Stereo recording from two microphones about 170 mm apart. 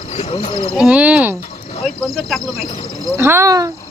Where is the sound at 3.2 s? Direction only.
15° right (ahead or behind).